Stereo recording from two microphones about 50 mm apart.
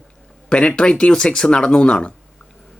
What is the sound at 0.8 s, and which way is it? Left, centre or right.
Speech, left.